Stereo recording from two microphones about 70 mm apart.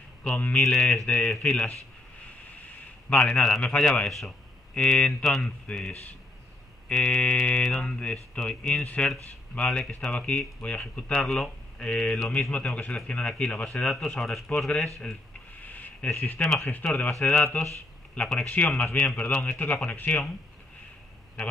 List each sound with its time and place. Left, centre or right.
0.2 s speech: centre
2.5 s a sound: left
3.3 s speech: centre
3.6 s speech: centre
5.2 s speech: centre
5.7 s speech: centre
7.6 s speech: centre
7.9 s speech: centre
11.2 s speech: centre
11.8 s speech: centre
15.6 s a sound: left
16.1 s speech: left
16.4 s speech: centre
16.8 s speech: left